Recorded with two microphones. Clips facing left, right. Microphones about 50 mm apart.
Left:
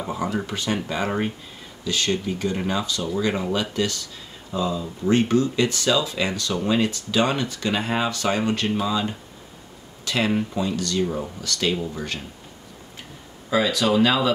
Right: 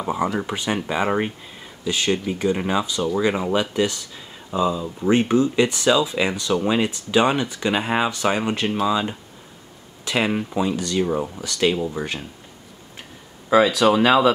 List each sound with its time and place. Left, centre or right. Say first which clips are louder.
0.0 s speech: right 3 dB; centre
13.5 s speech: right 5 dB; right